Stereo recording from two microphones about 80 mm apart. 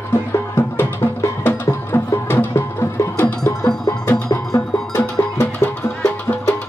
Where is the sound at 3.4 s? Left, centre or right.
Left.